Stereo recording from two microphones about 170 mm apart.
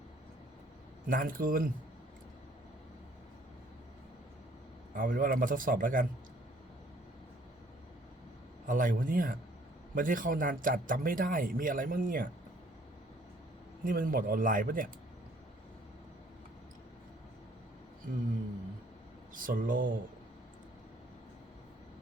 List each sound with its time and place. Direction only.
1.0 s speech: 55° right (ahead or behind)
4.9 s a man's voice: 55° right (ahead or behind)
8.6 s a man's voice: 50° right (ahead or behind)
13.8 s a man's voice: 55° right (ahead or behind)
19.3 s a man's voice: 55° right (ahead or behind)